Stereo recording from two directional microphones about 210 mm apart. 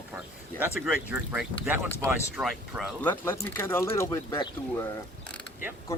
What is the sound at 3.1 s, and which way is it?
Speech, 10° left (ahead or behind).